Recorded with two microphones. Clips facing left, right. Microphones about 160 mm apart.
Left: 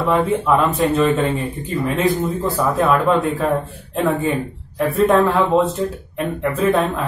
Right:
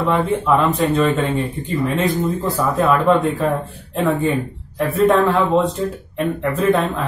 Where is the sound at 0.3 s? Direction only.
Centre (ahead or behind).